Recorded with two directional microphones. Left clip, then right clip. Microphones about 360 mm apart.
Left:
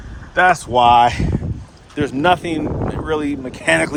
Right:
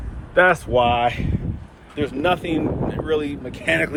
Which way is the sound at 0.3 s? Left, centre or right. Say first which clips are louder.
Left 2 dB; centre.